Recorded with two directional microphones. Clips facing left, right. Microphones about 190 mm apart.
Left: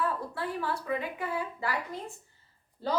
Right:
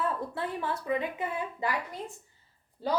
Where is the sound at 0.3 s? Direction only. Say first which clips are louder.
Even; 20° right (ahead or behind).